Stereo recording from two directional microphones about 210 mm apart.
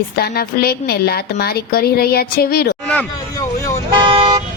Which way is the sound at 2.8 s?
10° left (ahead or behind).